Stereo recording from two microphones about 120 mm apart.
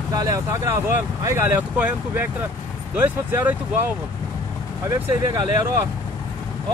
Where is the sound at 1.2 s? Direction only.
20° right (ahead or behind).